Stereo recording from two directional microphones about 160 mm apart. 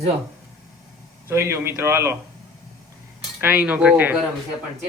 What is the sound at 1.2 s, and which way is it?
Speech, 15° right (ahead or behind).